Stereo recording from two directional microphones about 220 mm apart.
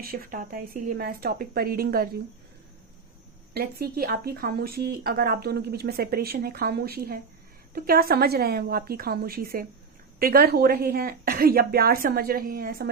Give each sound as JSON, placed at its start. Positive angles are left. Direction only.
{"t": 0.0, "sound": "a woman's voice", "side_deg": -40}
{"t": 3.5, "sound": "speech", "side_deg": -45}